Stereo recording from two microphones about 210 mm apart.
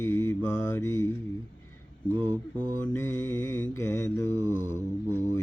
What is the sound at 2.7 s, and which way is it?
Mantra, 15° left (ahead or behind).